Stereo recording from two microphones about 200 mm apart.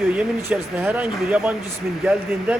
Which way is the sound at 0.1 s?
5° right (ahead or behind).